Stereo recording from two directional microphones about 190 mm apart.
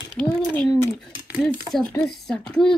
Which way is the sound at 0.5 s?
5° left (ahead or behind).